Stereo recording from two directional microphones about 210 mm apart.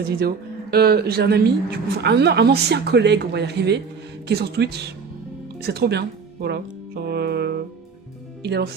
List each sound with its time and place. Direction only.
0.1 s speech: 45° right (ahead or behind)